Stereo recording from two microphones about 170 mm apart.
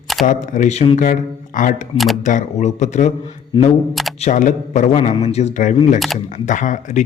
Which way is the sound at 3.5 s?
30° left (ahead or behind).